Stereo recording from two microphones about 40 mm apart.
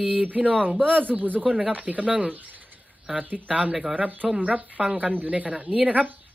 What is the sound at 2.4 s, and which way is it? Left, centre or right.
Speech, right.